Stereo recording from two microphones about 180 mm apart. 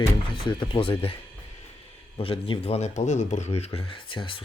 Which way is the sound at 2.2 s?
30° left (ahead or behind).